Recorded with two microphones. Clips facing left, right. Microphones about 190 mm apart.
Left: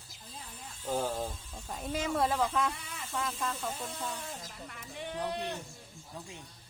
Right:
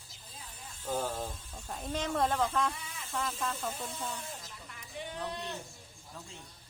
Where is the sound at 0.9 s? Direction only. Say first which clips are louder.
Left 2 dB; 15° left (ahead or behind).